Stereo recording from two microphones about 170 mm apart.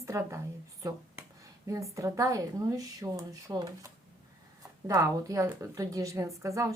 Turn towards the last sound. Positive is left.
turn(degrees=-20)  # may be behind; listen again after turning